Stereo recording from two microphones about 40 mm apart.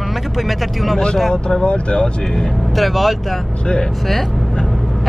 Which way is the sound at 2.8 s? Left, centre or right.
Centre.